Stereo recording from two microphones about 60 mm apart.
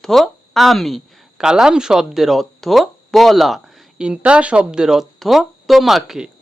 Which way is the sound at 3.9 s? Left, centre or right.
Centre.